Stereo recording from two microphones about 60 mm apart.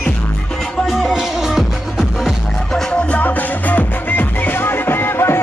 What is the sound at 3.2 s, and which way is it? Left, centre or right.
Music, left.